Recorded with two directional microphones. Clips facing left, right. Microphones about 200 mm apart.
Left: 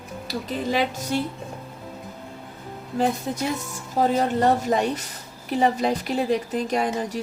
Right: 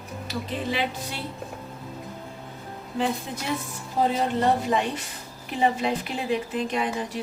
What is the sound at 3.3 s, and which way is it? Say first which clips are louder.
A woman's voice: left 4 dB; 45° left (ahead or behind).